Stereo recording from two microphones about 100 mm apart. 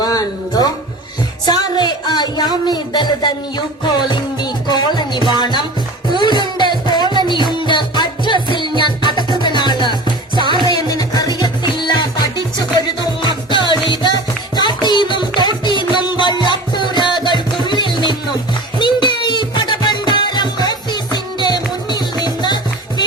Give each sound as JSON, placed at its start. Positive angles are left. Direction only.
{"t": 0.0, "sound": "a sound", "side_deg": 40}
{"t": 2.6, "sound": "speech", "side_deg": 45}
{"t": 3.8, "sound": "music", "side_deg": 45}